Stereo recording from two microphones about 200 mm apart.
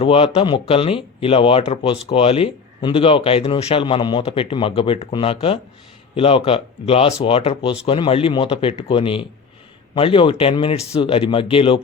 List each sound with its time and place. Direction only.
0.0 s speech: 30° left (ahead or behind)